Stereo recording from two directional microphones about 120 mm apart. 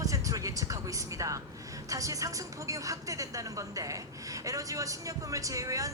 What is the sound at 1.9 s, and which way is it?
A woman's voice, 30° right (ahead or behind).